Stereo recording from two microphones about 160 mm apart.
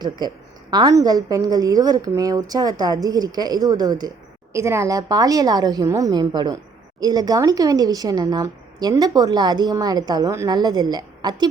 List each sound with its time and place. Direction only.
0.2 s a woman's voice: 25° right (ahead or behind)